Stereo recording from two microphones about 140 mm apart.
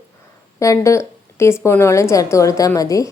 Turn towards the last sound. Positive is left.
turn(degrees=25)  # may be behind; listen again after turning